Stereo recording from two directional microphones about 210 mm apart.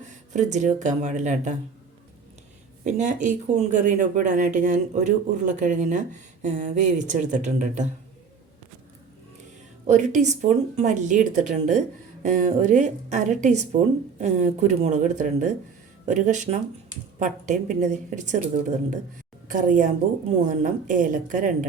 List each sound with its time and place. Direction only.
0.3 s speech: 35° right (ahead or behind)
2.8 s speech: 35° right (ahead or behind)
9.8 s speech: 35° right (ahead or behind)